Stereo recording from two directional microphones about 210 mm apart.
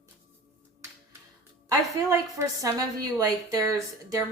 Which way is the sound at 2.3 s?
15° right (ahead or behind).